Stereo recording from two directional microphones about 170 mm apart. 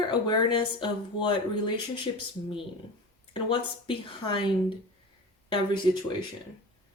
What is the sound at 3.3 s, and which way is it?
A woman's voice, 30° left (ahead or behind).